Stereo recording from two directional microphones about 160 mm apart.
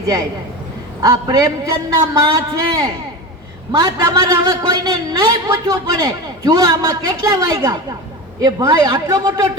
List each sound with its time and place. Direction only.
1.0 s a man's voice: 25° right (ahead or behind)